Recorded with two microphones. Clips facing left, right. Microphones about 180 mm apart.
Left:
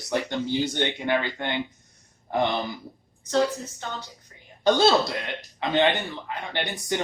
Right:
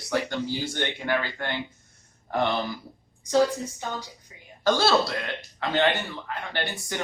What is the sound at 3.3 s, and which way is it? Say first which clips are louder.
Speech: right 2 dB; 10° right (ahead or behind).